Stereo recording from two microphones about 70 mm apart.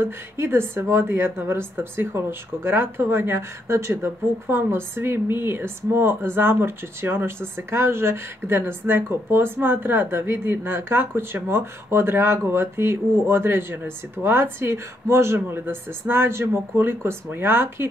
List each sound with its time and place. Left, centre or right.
0.0 s a woman's voice: right